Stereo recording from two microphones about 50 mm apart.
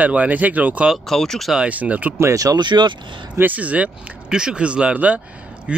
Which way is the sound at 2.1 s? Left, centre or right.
Right.